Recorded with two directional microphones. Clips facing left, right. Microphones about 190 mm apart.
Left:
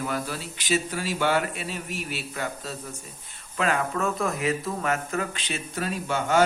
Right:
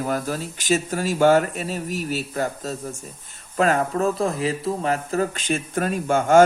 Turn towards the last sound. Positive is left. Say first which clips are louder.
# right 7 dB
turn(degrees=-45)  # may be behind; listen again after turning